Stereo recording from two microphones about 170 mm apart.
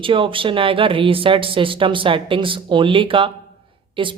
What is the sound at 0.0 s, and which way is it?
Speech, 30° right (ahead or behind).